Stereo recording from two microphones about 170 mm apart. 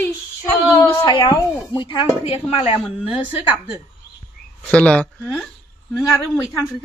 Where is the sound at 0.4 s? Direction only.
15° left (ahead or behind).